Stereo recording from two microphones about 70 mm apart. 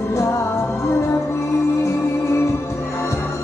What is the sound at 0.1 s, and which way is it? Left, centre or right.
Music, left.